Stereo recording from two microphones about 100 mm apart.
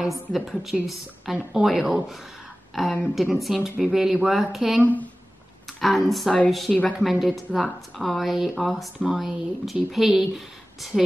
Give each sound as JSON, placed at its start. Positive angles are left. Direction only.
{"t": 0.3, "sound": "a woman's voice", "side_deg": 0}
{"t": 4.8, "sound": "speech", "side_deg": 15}
{"t": 5.8, "sound": "a woman's voice", "side_deg": 0}